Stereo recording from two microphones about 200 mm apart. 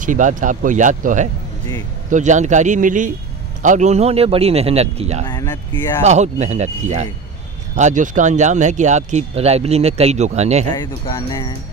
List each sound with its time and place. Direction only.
0.0 s speech: 40° right (ahead or behind)
5.3 s speech: 20° left (ahead or behind)
6.0 s speech: 35° right (ahead or behind)
10.8 s speech: 15° left (ahead or behind)